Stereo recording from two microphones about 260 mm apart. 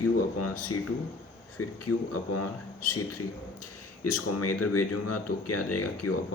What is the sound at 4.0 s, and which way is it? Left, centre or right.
Speech, left.